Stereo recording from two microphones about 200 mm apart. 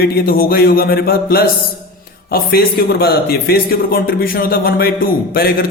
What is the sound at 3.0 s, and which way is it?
Speech, 50° left (ahead or behind).